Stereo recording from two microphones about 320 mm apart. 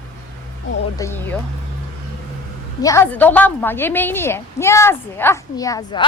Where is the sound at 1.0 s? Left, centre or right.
Centre.